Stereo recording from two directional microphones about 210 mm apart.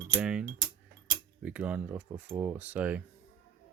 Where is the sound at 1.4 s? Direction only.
5° right (ahead or behind).